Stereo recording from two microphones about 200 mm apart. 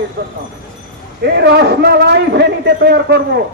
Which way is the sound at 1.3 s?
55° right (ahead or behind).